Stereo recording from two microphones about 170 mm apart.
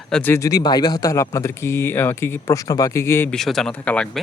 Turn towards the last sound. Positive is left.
turn(degrees=5)  # may be behind; listen again after turning